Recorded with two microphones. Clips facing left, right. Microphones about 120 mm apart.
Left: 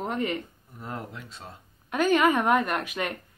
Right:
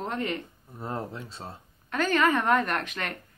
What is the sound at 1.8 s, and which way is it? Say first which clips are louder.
Speech: left 3 dB; 15° left (ahead or behind).